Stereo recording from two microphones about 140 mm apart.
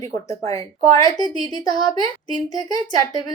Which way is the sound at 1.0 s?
30° left (ahead or behind).